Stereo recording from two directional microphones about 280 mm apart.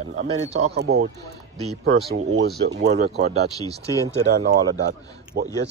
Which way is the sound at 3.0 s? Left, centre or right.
Right.